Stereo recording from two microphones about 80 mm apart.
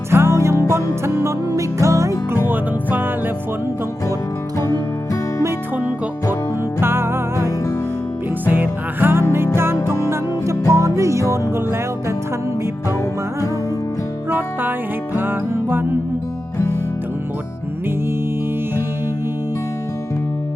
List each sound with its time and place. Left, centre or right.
0.1 s music: right
2.5 s music: right
6.7 s music: right
10.1 s music: right
14.3 s music: right